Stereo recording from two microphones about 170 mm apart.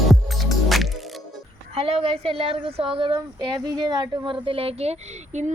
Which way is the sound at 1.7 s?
35° right (ahead or behind).